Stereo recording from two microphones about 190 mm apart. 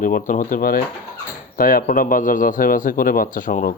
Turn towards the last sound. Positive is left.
turn(degrees=45)  # may be behind; listen again after turning